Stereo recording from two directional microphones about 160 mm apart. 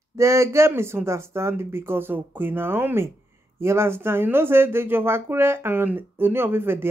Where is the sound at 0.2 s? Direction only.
15° right (ahead or behind).